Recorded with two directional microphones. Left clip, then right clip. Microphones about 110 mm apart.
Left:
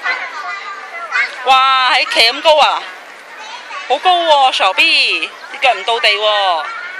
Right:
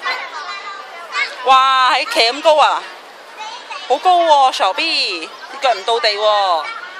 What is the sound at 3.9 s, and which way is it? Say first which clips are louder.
Speech: even; 30° right (ahead or behind).